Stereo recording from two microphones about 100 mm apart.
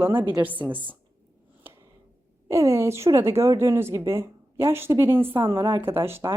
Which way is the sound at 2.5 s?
30° right (ahead or behind).